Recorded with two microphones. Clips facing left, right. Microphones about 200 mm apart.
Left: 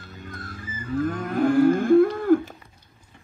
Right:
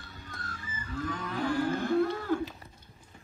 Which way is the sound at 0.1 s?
50° left (ahead or behind).